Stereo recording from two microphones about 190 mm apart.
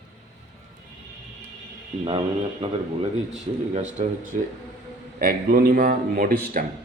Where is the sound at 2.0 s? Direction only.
30° right (ahead or behind).